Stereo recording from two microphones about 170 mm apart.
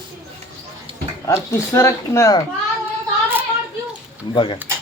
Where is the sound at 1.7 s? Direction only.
15° left (ahead or behind).